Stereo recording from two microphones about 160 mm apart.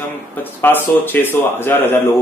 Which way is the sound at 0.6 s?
15° left (ahead or behind).